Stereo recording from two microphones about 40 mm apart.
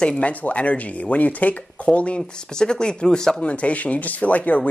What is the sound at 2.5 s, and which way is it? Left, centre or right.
Speech, centre.